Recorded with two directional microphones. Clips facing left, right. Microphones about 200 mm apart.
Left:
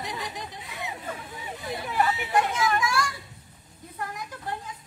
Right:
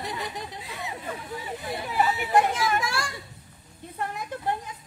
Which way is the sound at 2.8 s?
30° right (ahead or behind).